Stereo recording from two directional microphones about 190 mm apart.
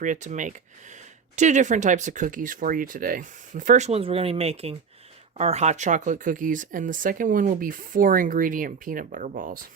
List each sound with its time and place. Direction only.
0.0 s speech: 40° right (ahead or behind)